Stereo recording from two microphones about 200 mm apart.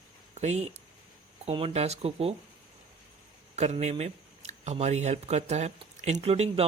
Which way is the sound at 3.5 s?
35° right (ahead or behind).